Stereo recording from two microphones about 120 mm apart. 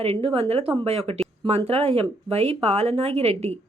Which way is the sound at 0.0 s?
50° right (ahead or behind).